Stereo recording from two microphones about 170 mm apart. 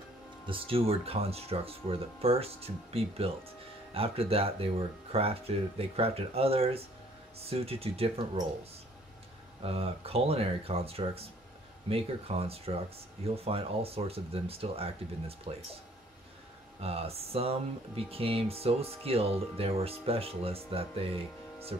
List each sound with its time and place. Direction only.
0.5 s speech: 35° right (ahead or behind)
9.6 s speech: 35° right (ahead or behind)
16.8 s speech: 35° right (ahead or behind)